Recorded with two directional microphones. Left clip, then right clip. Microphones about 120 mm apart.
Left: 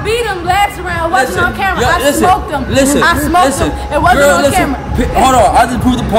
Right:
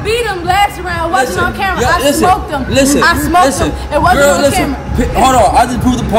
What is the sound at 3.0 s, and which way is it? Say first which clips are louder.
Speech: even; centre (ahead or behind).